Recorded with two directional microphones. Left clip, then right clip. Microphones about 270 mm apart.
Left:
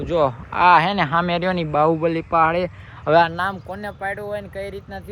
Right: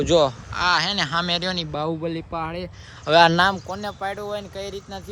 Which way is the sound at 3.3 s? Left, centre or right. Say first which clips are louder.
Right 5 dB; right.